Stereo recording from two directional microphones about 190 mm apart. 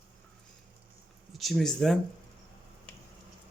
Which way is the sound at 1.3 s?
Centre (ahead or behind).